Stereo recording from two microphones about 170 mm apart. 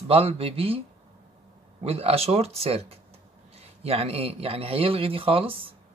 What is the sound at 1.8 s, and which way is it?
Speech, 35° right (ahead or behind).